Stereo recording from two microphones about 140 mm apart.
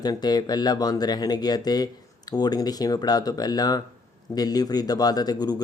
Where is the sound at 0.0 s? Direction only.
30° left (ahead or behind).